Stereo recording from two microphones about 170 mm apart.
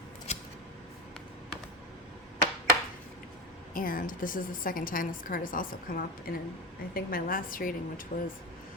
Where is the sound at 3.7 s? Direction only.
55° left (ahead or behind).